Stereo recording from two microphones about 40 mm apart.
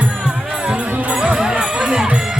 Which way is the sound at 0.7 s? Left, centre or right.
Right.